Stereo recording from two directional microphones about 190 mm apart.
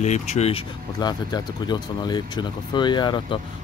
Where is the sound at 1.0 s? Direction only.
20° left (ahead or behind).